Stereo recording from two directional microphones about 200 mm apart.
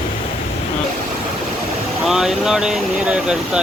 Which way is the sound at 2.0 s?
Centre (ahead or behind).